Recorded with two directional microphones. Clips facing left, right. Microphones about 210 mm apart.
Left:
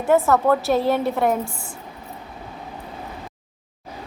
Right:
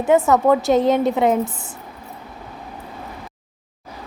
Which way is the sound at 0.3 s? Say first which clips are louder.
Right 3 dB; 15° right (ahead or behind).